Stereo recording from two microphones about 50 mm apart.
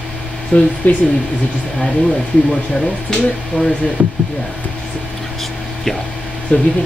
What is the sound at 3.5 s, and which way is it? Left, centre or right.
Speech, left.